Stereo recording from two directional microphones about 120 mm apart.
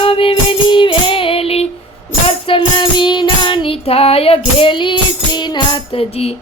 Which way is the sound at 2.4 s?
45° left (ahead or behind).